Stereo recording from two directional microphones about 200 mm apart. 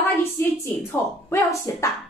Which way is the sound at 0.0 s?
15° left (ahead or behind).